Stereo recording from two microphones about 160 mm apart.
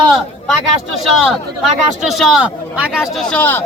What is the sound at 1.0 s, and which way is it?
Speech, centre (ahead or behind).